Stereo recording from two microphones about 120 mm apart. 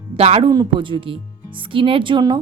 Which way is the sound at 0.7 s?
45° right (ahead or behind).